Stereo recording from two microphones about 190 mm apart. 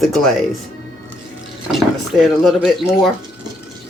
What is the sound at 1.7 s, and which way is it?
Speech, centre (ahead or behind).